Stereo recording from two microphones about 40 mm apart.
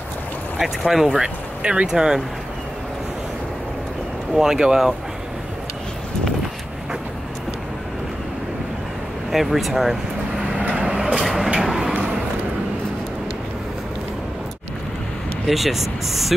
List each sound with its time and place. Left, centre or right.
0.6 s speech: centre
1.6 s speech: right
4.4 s speech: centre
9.3 s speech: centre
10.7 s vehicle: right
11.2 s a sound: centre
11.9 s a sound: right
15.4 s speech: centre